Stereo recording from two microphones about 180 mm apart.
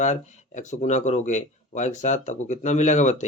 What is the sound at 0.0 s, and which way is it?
Speech, 40° left (ahead or behind).